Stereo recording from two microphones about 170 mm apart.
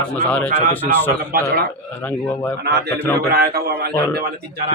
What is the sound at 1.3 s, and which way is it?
Speech, 65° right (ahead or behind).